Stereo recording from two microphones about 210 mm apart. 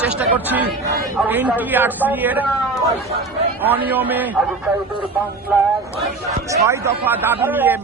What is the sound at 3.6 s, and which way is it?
Speech, 10° right (ahead or behind).